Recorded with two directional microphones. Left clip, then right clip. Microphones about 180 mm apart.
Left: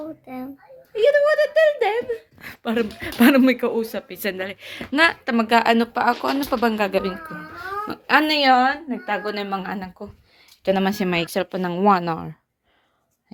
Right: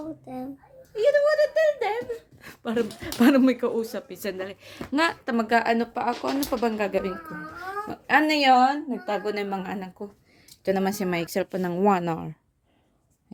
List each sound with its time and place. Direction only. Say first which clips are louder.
0.3 s a child's voice: left 2 dB; 35° right (ahead or behind)
0.9 s speech: left 4 dB; 50° left (ahead or behind)
2.4 s speech: left 2 dB; centre (ahead or behind)
8.4 s a woman's voice: left 2 dB; 30° right (ahead or behind)
10.6 s speech: left 4 dB; centre (ahead or behind)
11.3 s a woman's voice: left 3 dB; 10° right (ahead or behind)